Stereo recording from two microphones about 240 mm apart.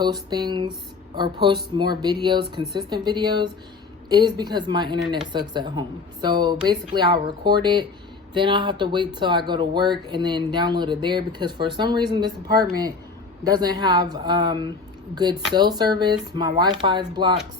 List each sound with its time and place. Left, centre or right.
0.0 s speech: centre